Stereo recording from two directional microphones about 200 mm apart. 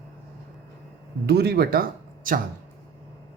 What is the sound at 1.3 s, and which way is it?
Speech, 50° right (ahead or behind).